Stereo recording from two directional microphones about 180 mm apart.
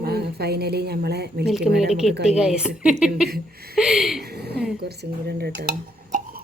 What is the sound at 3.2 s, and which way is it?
Speech, 60° right (ahead or behind).